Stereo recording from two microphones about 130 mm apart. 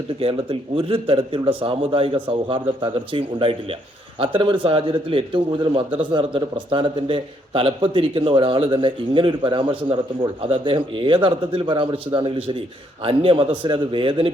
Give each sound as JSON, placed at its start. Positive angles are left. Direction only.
{"t": 0.2, "sound": "a man's voice", "side_deg": -45}